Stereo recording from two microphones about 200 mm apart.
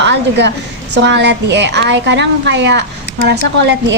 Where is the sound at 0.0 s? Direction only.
60° right (ahead or behind).